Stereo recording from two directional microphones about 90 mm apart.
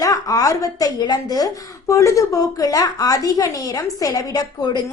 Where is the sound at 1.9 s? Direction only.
35° left (ahead or behind).